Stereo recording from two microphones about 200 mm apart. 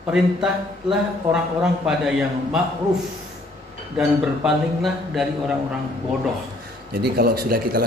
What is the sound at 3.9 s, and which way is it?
A man's voice, centre (ahead or behind).